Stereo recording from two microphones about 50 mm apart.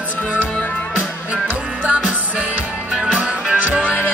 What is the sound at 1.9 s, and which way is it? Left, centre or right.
Music, right.